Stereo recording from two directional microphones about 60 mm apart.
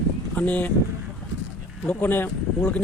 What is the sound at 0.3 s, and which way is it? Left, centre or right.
Speech, left.